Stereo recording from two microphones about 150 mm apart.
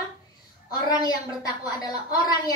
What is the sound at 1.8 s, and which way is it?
Speech, 25° left (ahead or behind).